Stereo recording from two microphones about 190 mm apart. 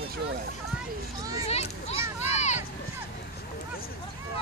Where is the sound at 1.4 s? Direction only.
35° left (ahead or behind).